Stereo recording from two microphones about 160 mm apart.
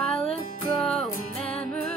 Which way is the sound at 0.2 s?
40° left (ahead or behind).